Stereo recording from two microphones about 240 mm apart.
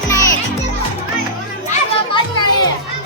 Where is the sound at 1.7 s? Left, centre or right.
Centre.